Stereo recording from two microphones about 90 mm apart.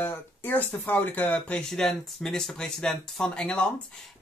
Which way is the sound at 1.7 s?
5° left (ahead or behind).